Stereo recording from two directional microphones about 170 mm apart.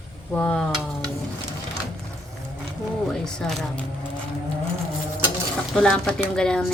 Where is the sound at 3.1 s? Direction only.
5° left (ahead or behind).